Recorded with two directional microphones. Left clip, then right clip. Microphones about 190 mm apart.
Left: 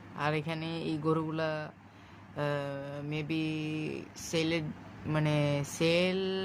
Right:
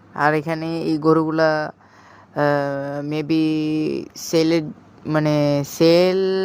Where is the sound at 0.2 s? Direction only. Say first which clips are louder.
Right 14 dB; 35° right (ahead or behind).